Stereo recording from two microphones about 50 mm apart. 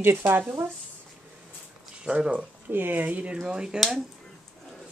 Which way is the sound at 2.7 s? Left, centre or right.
Right.